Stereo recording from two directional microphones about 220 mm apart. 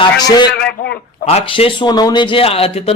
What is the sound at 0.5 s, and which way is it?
Speech, 45° left (ahead or behind).